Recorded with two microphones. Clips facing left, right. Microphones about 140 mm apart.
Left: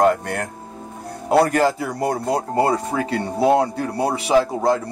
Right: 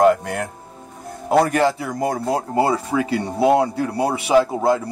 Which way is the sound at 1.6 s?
Centre (ahead or behind).